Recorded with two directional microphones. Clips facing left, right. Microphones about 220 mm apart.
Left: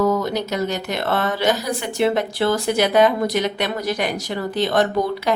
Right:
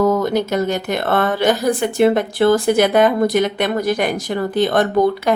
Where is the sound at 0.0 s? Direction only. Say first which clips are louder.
Right 4 dB; 50° right (ahead or behind).